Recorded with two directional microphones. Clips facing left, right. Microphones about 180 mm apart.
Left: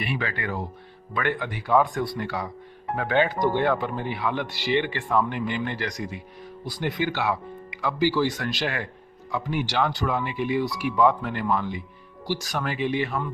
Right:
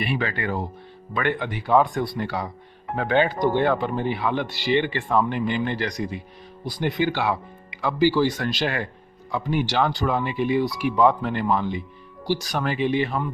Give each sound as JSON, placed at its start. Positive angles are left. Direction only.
{"t": 0.0, "sound": "speech", "side_deg": -30}